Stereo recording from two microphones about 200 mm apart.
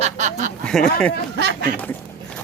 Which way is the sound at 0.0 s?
35° right (ahead or behind).